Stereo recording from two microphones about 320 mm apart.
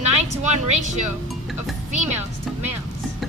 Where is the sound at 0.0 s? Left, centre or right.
Right.